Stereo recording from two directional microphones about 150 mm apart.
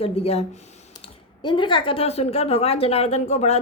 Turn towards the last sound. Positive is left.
turn(degrees=45)  # may be behind; listen again after turning